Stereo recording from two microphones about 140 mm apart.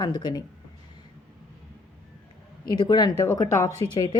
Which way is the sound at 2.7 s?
30° left (ahead or behind).